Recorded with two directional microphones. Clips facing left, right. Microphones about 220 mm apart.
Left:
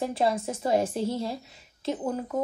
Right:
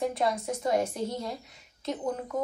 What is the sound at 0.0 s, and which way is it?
Speech, 30° left (ahead or behind).